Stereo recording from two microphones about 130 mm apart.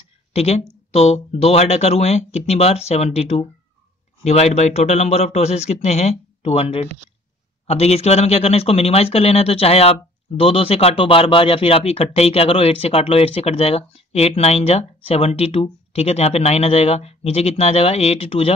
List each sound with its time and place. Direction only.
0.3 s speech: 50° left (ahead or behind)